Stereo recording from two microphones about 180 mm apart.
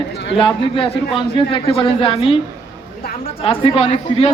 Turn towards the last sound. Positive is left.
turn(degrees=35)  # may be behind; listen again after turning